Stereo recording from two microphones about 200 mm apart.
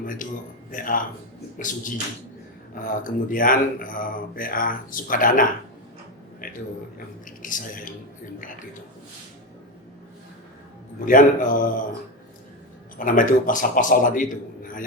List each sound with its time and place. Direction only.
0.0 s a man's voice: 40° left (ahead or behind)
11.0 s speech: 40° left (ahead or behind)
13.0 s speech: 45° left (ahead or behind)